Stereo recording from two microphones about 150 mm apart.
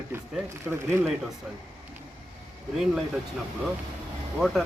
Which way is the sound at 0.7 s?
15° right (ahead or behind).